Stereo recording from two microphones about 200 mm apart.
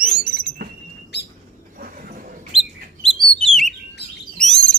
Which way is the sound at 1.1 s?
60° left (ahead or behind).